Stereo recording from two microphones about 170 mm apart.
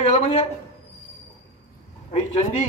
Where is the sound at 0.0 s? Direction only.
35° left (ahead or behind).